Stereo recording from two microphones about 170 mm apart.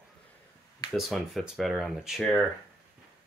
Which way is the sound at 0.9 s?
Centre (ahead or behind).